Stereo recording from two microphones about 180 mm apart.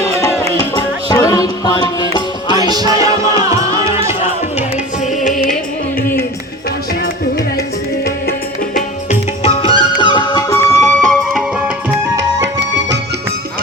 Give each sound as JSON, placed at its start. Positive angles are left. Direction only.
{"t": 0.0, "sound": "music", "side_deg": 15}
{"t": 2.7, "sound": "music", "side_deg": -20}
{"t": 8.0, "sound": "music", "side_deg": 60}
{"t": 9.0, "sound": "music", "side_deg": 35}